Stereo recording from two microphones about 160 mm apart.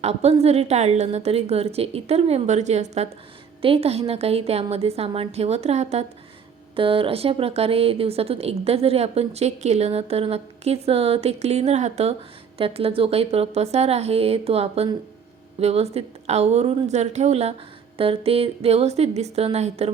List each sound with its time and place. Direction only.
0.0 s a woman's voice: 40° right (ahead or behind)